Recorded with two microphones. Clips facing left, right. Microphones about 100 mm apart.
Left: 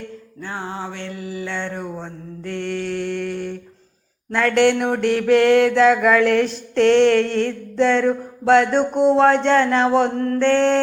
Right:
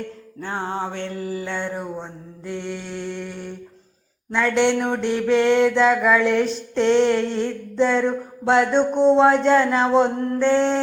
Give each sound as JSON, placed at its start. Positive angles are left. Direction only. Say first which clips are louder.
{"t": 0.4, "sound": "music", "louder": "right 3 dB", "side_deg": -30}
{"t": 0.9, "sound": "mantra", "louder": "right 2 dB", "side_deg": -45}
{"t": 1.7, "sound": "mantra", "louder": "even", "side_deg": 0}